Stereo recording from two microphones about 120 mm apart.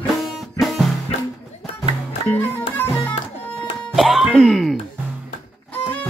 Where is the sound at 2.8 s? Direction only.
20° left (ahead or behind).